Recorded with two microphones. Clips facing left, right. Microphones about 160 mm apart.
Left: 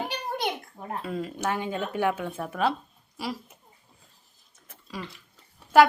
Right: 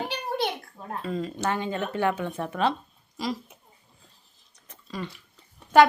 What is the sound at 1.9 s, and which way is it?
A woman's voice, 10° left (ahead or behind).